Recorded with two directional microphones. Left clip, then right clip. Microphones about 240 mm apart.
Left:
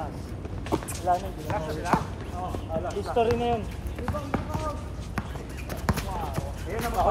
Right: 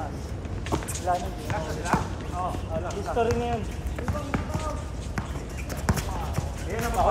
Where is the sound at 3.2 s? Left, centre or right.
Left.